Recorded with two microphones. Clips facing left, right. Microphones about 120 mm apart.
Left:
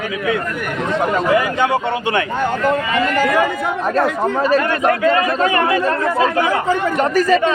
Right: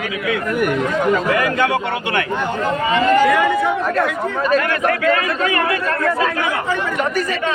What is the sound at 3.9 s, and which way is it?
Speech, 30° left (ahead or behind).